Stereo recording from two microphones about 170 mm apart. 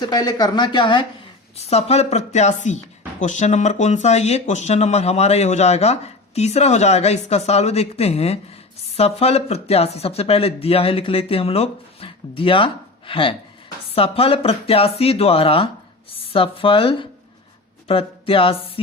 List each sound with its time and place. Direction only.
0.0 s speech: 25° left (ahead or behind)
1.5 s speech: 40° left (ahead or behind)